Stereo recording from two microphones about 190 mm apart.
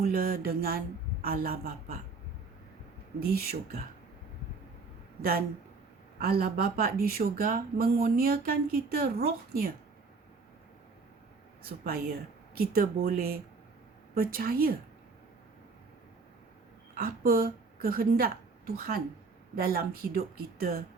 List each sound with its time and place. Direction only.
0.0 s speech: 50° right (ahead or behind)
3.2 s speech: 55° right (ahead or behind)
6.1 s speech: 55° right (ahead or behind)
11.6 s speech: 55° right (ahead or behind)
16.9 s a woman's voice: 50° right (ahead or behind)